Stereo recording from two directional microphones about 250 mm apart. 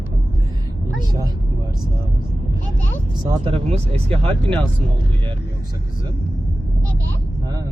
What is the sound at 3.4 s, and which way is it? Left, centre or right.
Speech, right.